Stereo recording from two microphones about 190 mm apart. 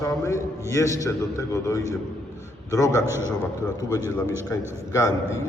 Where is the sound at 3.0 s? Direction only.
15° right (ahead or behind).